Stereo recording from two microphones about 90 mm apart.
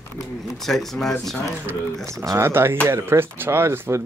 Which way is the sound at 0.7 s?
5° left (ahead or behind).